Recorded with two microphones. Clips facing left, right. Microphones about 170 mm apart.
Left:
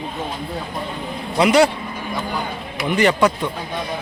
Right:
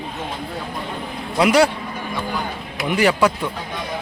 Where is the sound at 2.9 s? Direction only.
5° right (ahead or behind).